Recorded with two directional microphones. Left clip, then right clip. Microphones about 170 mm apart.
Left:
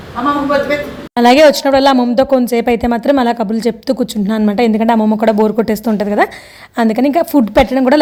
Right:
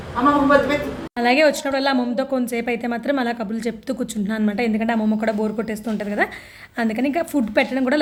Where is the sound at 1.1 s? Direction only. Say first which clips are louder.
Left 10 dB; 45° left (ahead or behind).